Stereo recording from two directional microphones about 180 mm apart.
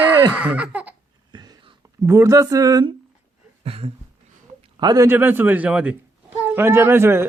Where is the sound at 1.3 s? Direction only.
25° right (ahead or behind).